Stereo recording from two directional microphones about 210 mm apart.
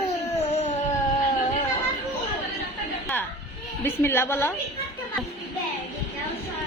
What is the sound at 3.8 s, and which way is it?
Speech, 10° left (ahead or behind).